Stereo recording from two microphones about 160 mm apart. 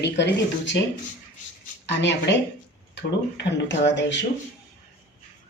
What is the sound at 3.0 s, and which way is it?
Speech, 90° left.